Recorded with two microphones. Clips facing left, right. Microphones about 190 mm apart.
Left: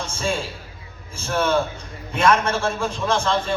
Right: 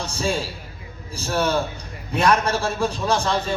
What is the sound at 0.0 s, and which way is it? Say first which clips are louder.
A man's voice: right 1 dB; 35° right (ahead or behind).